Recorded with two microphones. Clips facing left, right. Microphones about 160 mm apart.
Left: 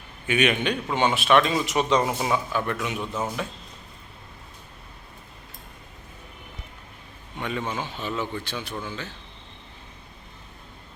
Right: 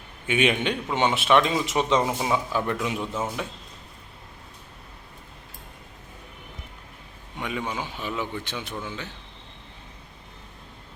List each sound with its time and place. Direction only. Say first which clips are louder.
0.3 s speech: even; 25° right (ahead or behind)
2.1 s a man's voice: even; 10° right (ahead or behind)
3.0 s a man's voice: even; 5° right (ahead or behind)
7.3 s a man's voice: left 1 dB; 10° right (ahead or behind)